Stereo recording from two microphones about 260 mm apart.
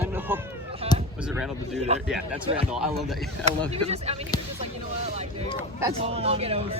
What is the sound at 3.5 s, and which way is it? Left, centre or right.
Speech, right.